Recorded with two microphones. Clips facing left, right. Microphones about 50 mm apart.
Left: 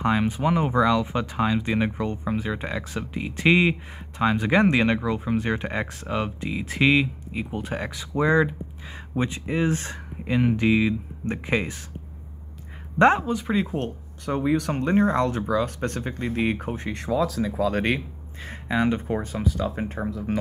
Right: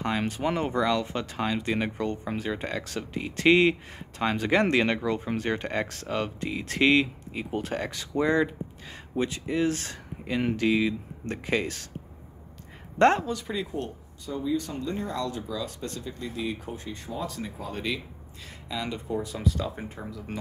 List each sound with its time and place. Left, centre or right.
0.0 s speech: centre
13.0 s speech: centre
13.7 s speech: left
16.9 s speech: left
18.4 s speech: left
19.3 s speech: left
19.8 s speech: left
20.1 s speech: left